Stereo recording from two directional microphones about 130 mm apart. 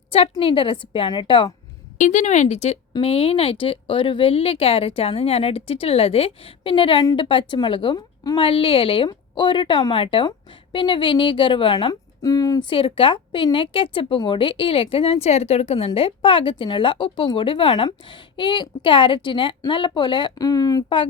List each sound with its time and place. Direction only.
0.1 s a woman's voice: 45° left (ahead or behind)
2.0 s a woman's voice: 70° left (ahead or behind); by 8.4 s 30° left (ahead or behind)
8.4 s a woman's voice: 45° left (ahead or behind)
11.9 s a woman's voice: 25° left (ahead or behind)